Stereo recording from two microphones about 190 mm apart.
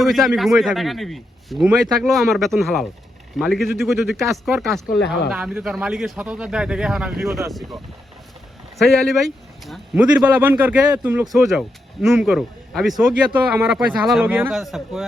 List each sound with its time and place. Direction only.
0.0 s speech: centre (ahead or behind)
7.3 s speech: 15° right (ahead or behind)
8.8 s speech: centre (ahead or behind)